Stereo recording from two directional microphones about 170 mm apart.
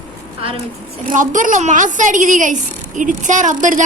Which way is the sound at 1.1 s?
50° right (ahead or behind).